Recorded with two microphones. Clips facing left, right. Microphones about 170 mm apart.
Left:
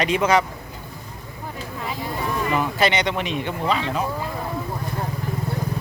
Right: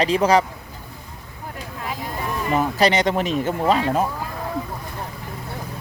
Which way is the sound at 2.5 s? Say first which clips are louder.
Right 4 dB; 40° right (ahead or behind).